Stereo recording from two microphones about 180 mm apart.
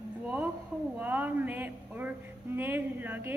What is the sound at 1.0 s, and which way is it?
A woman's voice, 10° right (ahead or behind).